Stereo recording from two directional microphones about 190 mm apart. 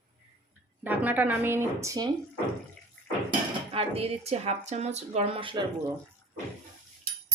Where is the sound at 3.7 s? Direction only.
30° right (ahead or behind).